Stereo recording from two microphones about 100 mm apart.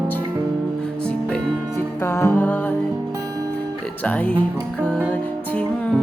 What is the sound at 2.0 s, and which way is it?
Music, 30° left (ahead or behind).